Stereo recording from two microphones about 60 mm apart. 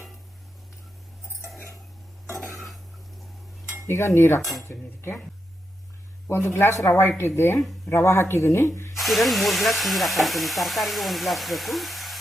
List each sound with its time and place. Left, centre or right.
2.2 s a sound: right
3.8 s speech: left
4.4 s hiss: centre
4.6 s speech: left
6.2 s speech: left
9.0 s hiss: centre